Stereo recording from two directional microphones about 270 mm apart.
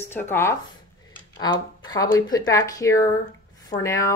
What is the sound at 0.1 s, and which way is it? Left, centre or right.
Speech, centre.